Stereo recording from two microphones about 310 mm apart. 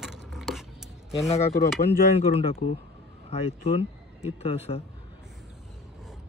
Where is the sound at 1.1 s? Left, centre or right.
Centre.